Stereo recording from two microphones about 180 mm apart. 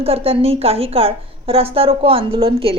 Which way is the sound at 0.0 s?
35° right (ahead or behind).